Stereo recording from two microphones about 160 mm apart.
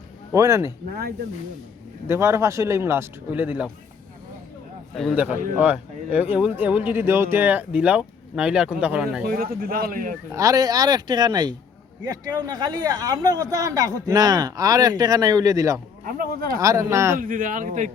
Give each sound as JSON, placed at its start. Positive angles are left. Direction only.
{"t": 0.3, "sound": "speech", "side_deg": -20}
{"t": 2.0, "sound": "speech", "side_deg": -15}
{"t": 5.5, "sound": "speech", "side_deg": -10}
{"t": 9.2, "sound": "speech", "side_deg": -70}
{"t": 10.3, "sound": "speech", "side_deg": -20}
{"t": 16.0, "sound": "speech", "side_deg": -60}
{"t": 16.6, "sound": "speech", "side_deg": -20}
{"t": 17.2, "sound": "speech", "side_deg": -60}